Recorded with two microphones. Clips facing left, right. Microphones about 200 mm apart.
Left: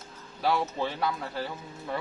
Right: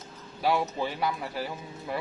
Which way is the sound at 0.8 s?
10° right (ahead or behind).